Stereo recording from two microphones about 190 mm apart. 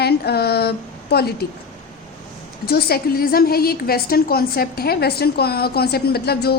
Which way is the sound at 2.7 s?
55° left (ahead or behind).